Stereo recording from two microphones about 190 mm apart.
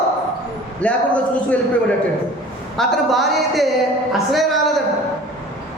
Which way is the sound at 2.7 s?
Centre (ahead or behind).